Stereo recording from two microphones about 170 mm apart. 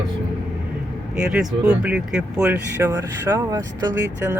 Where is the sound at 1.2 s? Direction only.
5° right (ahead or behind).